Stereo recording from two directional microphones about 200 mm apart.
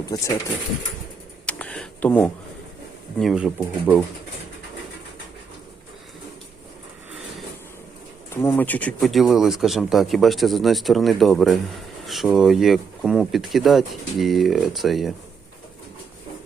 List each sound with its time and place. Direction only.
0.0 s speech: 15° left (ahead or behind)
1.5 s a sound: 5° left (ahead or behind)
3.2 s speech: centre (ahead or behind)
8.3 s speech: 10° left (ahead or behind)